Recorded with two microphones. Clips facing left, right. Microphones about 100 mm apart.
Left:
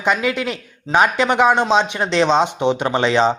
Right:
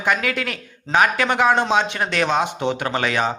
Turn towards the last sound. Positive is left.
turn(degrees=25)  # may be behind; listen again after turning